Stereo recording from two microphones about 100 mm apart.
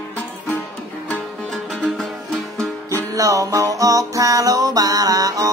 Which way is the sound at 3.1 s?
35° right (ahead or behind).